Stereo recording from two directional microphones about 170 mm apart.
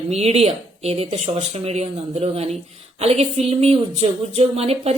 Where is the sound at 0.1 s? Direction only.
40° right (ahead or behind).